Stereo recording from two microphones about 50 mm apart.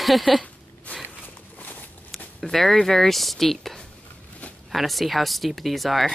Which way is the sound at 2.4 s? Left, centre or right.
Centre.